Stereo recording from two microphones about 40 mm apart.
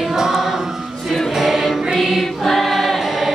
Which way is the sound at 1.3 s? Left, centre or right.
Centre.